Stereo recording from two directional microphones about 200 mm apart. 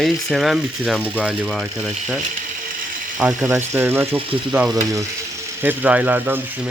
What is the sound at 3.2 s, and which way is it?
Speech, 10° right (ahead or behind).